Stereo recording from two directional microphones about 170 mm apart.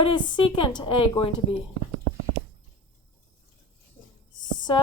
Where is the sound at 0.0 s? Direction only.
30° left (ahead or behind).